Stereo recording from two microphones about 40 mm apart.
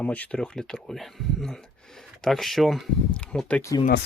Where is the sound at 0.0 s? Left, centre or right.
Left.